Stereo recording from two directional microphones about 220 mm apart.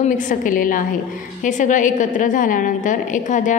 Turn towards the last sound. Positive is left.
turn(degrees=35)  # may be behind; listen again after turning